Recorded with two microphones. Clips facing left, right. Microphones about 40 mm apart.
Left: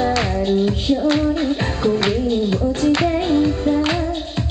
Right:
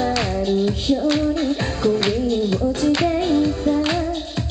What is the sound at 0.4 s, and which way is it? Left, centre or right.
Music, left.